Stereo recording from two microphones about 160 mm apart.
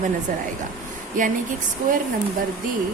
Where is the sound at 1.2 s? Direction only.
55° right (ahead or behind).